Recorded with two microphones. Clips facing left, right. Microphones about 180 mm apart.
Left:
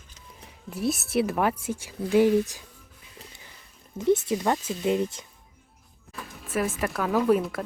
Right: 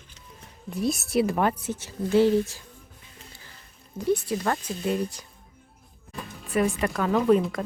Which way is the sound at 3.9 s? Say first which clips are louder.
Left 2 dB; 20° left (ahead or behind).